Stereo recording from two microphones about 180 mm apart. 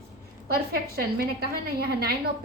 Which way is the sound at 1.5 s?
60° right (ahead or behind).